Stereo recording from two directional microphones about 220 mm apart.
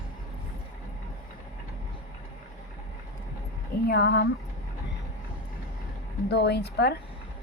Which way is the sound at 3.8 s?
50° left (ahead or behind).